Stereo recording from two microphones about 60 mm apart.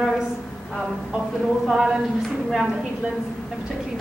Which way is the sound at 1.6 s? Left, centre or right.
Centre.